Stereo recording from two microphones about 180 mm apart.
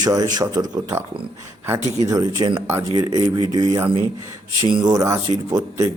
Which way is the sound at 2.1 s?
20° right (ahead or behind).